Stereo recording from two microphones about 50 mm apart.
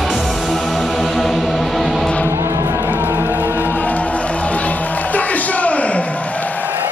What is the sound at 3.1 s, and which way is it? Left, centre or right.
Music, right.